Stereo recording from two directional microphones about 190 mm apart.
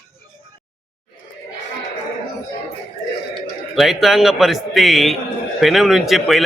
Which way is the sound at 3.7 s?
Centre (ahead or behind).